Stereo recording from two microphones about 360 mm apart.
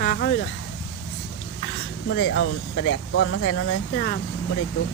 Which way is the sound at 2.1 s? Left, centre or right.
Left.